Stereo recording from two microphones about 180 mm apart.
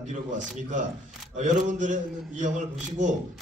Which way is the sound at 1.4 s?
45° right (ahead or behind).